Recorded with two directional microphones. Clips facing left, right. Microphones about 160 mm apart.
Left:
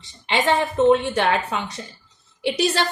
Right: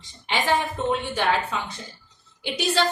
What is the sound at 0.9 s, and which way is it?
A woman's voice, 75° left (ahead or behind).